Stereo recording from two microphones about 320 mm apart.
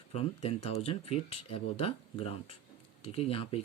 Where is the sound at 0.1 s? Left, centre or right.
Centre.